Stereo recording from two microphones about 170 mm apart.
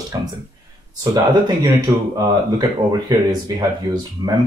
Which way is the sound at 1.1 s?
25° right (ahead or behind).